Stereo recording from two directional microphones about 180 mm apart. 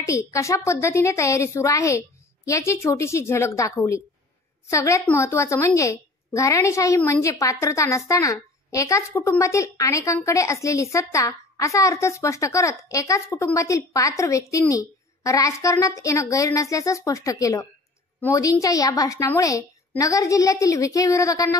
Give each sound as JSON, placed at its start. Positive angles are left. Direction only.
{"t": 0.0, "sound": "a woman's voice", "side_deg": 15}